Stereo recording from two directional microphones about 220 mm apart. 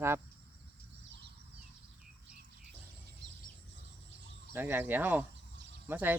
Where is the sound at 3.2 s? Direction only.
90° right.